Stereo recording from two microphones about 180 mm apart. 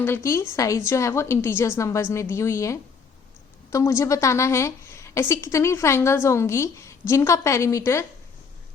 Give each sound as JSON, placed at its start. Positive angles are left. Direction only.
{"t": 0.0, "sound": "a woman's voice", "side_deg": 15}